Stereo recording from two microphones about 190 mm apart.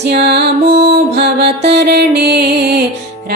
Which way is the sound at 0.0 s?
60° right (ahead or behind).